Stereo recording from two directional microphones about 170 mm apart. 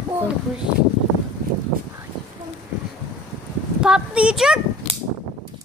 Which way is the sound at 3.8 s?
5° right (ahead or behind).